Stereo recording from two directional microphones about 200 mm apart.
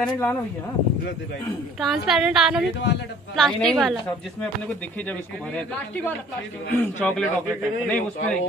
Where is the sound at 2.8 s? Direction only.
60° left (ahead or behind).